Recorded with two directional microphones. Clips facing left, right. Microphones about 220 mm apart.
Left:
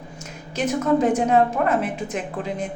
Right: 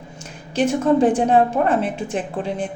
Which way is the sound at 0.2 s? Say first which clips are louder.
Right 6 dB; 30° right (ahead or behind).